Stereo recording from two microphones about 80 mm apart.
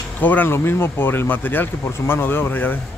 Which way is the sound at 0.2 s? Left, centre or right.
Left.